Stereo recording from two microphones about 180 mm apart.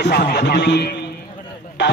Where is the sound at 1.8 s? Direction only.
85° left.